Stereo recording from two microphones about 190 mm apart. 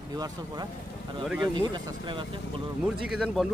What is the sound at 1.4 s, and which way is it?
Speech, 25° right (ahead or behind).